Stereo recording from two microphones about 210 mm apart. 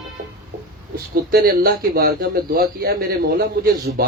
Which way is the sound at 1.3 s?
45° right (ahead or behind).